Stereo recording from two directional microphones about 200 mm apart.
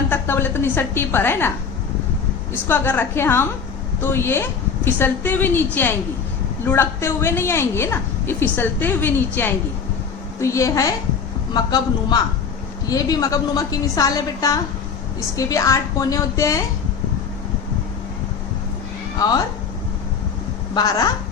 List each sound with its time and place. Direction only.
0.1 s a woman's voice: 10° left (ahead or behind)
2.6 s a woman's voice: 10° left (ahead or behind)
20.7 s a man's voice: 20° left (ahead or behind)